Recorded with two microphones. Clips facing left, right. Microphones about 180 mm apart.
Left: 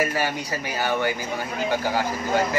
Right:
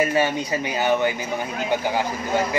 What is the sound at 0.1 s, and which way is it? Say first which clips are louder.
Speech: right 5 dB; 20° right (ahead or behind).